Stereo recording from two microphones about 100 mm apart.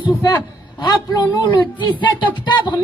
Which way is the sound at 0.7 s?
40° left (ahead or behind).